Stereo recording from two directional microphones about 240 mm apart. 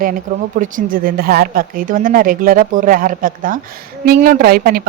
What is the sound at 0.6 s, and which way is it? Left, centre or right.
Speech, right.